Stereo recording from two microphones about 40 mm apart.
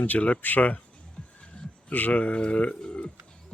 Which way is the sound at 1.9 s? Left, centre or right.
Left.